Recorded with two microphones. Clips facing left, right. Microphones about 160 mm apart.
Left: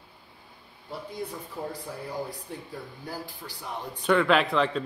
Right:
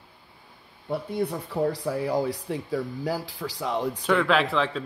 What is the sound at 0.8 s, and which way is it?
Speech, 65° right (ahead or behind).